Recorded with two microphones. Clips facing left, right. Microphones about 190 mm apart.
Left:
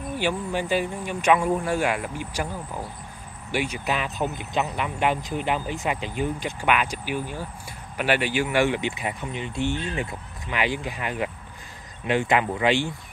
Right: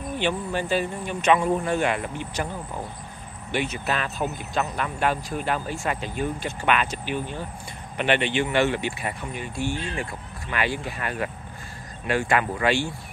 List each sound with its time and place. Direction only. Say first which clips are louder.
0.2 s speech: even; 10° left (ahead or behind)